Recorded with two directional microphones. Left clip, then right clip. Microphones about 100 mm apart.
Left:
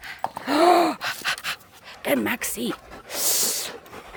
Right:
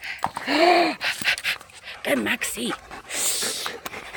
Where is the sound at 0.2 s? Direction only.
35° left (ahead or behind).